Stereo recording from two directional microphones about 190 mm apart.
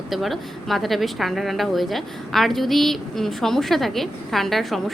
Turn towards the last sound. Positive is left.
turn(degrees=0)  # may be behind; listen again after turning